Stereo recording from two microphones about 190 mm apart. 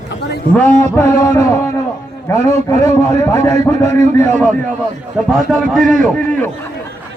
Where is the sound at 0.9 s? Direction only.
15° left (ahead or behind).